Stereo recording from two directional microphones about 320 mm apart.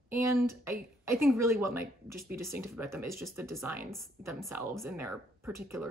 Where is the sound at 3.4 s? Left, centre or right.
Centre.